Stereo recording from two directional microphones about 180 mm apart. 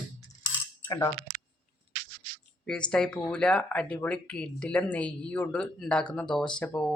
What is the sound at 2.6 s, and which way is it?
Speech, 5° left (ahead or behind).